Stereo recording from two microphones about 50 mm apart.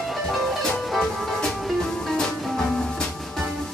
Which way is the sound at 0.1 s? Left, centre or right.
Centre.